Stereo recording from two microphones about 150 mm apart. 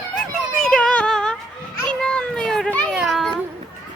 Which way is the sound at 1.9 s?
5° left (ahead or behind).